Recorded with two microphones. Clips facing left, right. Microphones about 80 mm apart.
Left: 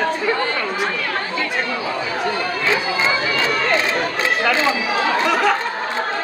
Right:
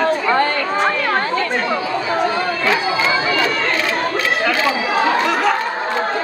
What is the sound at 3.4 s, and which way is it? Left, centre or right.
Chatter, left.